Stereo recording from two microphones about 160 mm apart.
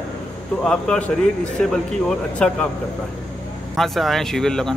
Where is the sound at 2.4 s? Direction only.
5° left (ahead or behind).